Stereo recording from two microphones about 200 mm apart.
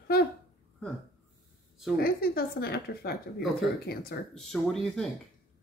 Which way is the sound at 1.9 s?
50° left (ahead or behind).